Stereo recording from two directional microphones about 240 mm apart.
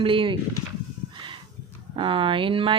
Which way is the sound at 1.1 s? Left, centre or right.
Centre.